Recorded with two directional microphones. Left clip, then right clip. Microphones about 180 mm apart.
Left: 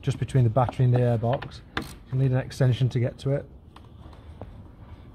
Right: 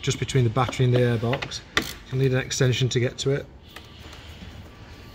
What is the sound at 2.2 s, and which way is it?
Speech, 50° left (ahead or behind).